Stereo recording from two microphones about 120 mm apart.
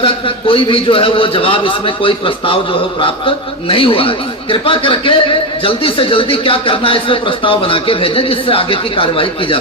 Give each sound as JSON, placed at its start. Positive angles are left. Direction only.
{"t": 0.0, "sound": "speech", "side_deg": 45}